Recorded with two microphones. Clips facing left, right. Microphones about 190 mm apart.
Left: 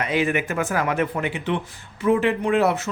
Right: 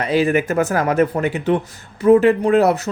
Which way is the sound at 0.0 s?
35° right (ahead or behind).